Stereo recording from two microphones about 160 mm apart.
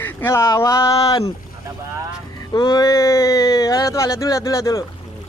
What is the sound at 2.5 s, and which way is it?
Speech, 25° left (ahead or behind).